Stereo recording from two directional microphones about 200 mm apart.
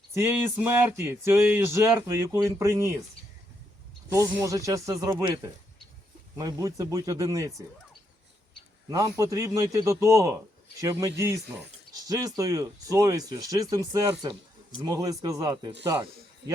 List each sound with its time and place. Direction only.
0.1 s speech: 10° right (ahead or behind)
4.4 s speech: 15° right (ahead or behind)
8.9 s speech: 15° right (ahead or behind)